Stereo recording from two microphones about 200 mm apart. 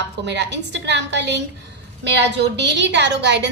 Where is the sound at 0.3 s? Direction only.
60° right (ahead or behind).